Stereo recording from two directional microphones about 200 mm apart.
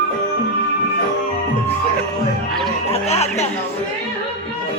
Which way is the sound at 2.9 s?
30° left (ahead or behind).